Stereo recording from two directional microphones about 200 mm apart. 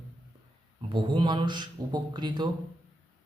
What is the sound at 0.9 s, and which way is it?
A man's voice, 25° right (ahead or behind).